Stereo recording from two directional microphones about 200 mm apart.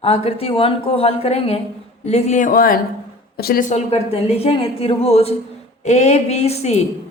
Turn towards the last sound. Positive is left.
turn(degrees=35)  # may be behind; listen again after turning